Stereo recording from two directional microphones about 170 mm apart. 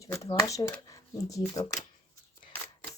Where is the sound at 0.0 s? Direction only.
20° left (ahead or behind).